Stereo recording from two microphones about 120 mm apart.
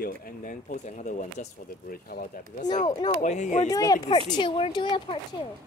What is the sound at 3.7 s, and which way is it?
Speech, 30° left (ahead or behind).